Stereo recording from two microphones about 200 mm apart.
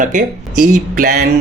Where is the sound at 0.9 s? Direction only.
40° right (ahead or behind).